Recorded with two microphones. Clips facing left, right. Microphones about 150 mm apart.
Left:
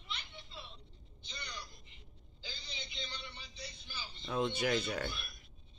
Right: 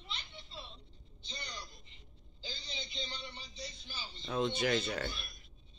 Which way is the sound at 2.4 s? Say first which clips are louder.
Right 3 dB; 25° right (ahead or behind).